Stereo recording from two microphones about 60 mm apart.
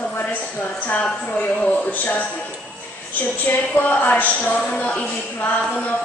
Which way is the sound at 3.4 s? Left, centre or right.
Left.